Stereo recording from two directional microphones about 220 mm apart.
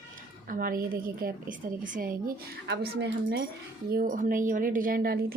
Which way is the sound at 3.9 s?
40° right (ahead or behind).